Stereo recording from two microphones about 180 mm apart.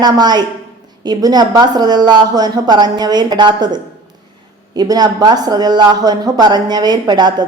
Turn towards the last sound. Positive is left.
turn(degrees=-25)  # may be behind; listen again after turning